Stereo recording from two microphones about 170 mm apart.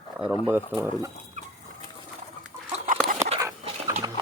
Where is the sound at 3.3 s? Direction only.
35° right (ahead or behind).